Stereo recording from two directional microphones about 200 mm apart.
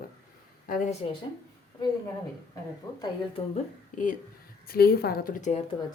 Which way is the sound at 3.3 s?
35° left (ahead or behind).